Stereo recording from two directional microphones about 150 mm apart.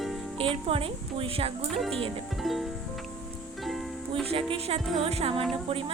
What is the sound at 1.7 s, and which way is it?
Speech, 5° left (ahead or behind).